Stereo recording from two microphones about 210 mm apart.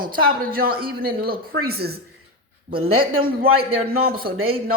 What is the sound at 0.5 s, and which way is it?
Speech, 45° right (ahead or behind).